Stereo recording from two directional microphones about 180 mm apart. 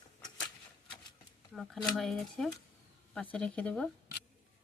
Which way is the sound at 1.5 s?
Centre (ahead or behind).